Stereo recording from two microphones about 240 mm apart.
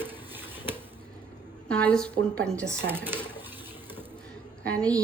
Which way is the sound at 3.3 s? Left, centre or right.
Centre.